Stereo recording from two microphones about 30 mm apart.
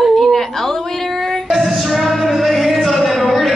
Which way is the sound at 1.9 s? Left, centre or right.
Centre.